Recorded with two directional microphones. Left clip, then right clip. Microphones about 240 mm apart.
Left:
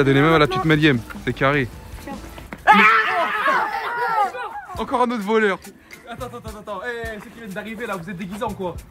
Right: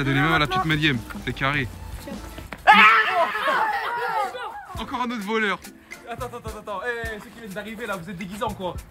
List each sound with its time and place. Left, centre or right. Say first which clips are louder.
0.0 s speech: left 6 dB; centre
2.5 s wail: even; right
3.2 s a sound: left 2 dB; centre
6.3 s speech: left 1 dB; centre
7.1 s speech: left 2 dB; centre